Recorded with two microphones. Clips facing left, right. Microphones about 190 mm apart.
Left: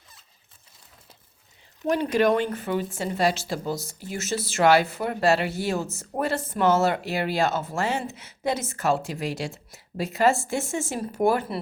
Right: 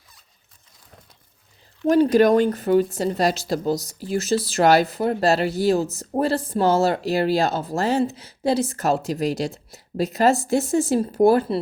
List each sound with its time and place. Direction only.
1.9 s speech: 40° right (ahead or behind)